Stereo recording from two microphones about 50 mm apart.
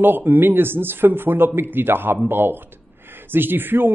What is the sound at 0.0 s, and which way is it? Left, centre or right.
Speech, right.